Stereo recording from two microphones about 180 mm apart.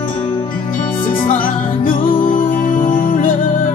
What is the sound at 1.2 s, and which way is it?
Music, 50° left (ahead or behind).